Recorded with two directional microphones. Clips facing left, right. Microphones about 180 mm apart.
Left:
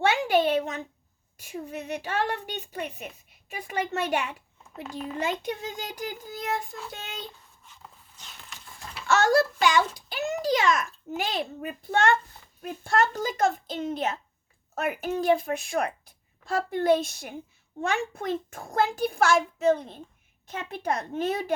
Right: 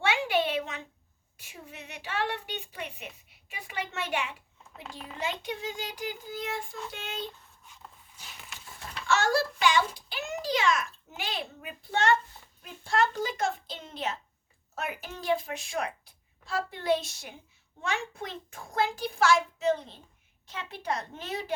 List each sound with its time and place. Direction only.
0.0 s a sound: 40° left (ahead or behind)
1.4 s a child's voice: 40° left (ahead or behind)
4.8 s speech: 5° left (ahead or behind)
5.2 s a child's voice: 45° left (ahead or behind)
7.6 s a sound: 5° right (ahead or behind)
9.0 s a child's voice: 40° left (ahead or behind)